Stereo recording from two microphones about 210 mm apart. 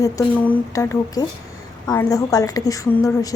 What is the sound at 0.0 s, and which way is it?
A woman's voice, 10° left (ahead or behind).